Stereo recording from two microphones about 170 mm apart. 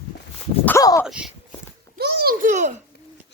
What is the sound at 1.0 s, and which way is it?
Speech, 5° right (ahead or behind).